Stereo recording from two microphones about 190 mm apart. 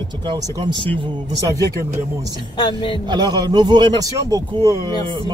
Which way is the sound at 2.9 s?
20° right (ahead or behind).